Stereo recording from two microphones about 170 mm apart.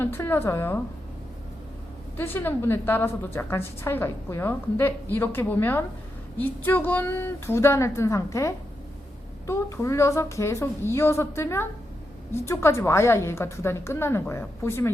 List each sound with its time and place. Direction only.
0.0 s a woman's voice: 15° left (ahead or behind)
2.1 s a woman's voice: 10° left (ahead or behind)